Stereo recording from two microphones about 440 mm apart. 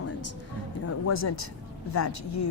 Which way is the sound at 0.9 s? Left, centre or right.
Left.